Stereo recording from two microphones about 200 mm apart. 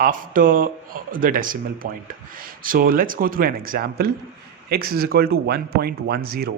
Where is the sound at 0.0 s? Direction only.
45° right (ahead or behind).